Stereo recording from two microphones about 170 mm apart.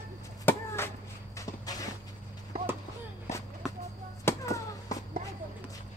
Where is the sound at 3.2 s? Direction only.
15° left (ahead or behind).